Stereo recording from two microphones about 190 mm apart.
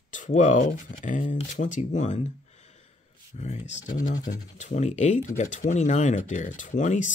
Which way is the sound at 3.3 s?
35° left (ahead or behind).